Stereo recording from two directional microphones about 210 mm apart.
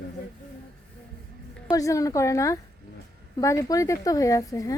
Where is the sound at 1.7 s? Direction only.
15° left (ahead or behind).